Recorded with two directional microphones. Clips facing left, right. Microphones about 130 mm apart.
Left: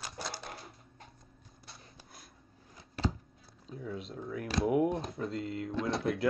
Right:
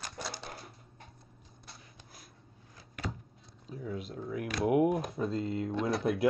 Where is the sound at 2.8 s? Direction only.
25° left (ahead or behind).